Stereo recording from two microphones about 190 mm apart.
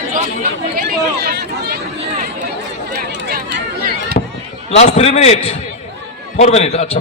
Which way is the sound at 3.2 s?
60° right (ahead or behind).